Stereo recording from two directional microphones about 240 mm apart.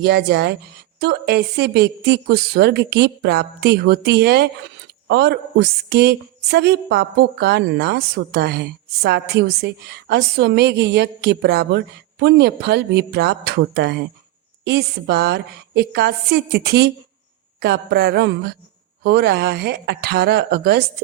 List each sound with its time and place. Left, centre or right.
0.0 s a woman's voice: right